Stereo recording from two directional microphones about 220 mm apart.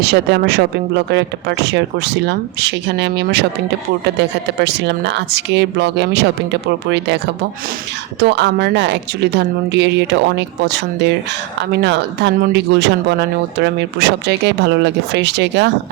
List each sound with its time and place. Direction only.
0.0 s speech: 50° right (ahead or behind)
8.2 s speech: 50° right (ahead or behind)